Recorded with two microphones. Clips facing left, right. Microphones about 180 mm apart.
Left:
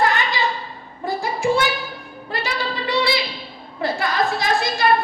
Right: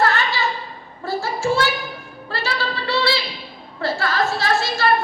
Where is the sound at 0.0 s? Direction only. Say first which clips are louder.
Even; 15° left (ahead or behind).